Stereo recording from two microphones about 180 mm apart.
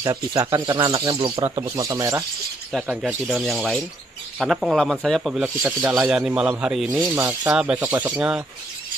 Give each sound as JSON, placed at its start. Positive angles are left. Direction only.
{"t": 0.0, "sound": "speech", "side_deg": -25}
{"t": 1.8, "sound": "speech", "side_deg": -15}
{"t": 2.7, "sound": "speech", "side_deg": -5}
{"t": 5.6, "sound": "speech", "side_deg": -15}